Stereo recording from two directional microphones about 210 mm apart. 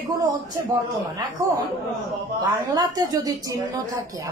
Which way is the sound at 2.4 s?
20° right (ahead or behind).